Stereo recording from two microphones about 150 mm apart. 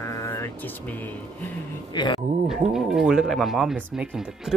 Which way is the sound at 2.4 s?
5° right (ahead or behind).